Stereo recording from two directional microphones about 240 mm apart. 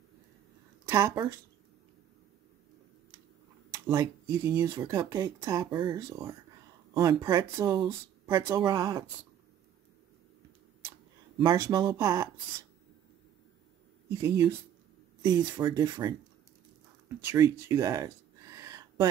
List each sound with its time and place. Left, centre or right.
0.8 s a woman's voice: centre
3.7 s speech: centre
11.3 s speech: centre
14.0 s speech: centre
17.2 s a sound: centre